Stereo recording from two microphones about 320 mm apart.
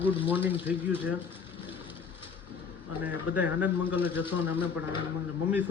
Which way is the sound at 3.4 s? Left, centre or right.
Centre.